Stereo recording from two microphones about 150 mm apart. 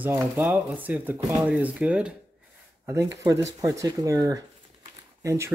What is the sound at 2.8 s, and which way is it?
Speech, 20° right (ahead or behind).